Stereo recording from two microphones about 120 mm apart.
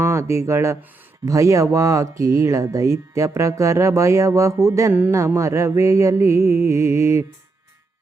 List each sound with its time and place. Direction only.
0.0 s speech: 25° right (ahead or behind)